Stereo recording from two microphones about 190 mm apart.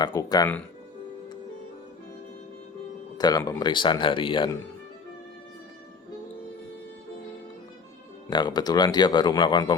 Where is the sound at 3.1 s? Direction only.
20° left (ahead or behind).